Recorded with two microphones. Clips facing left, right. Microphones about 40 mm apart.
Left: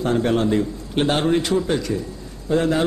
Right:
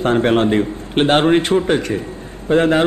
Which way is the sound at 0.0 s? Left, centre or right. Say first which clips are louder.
Right 5 dB; right.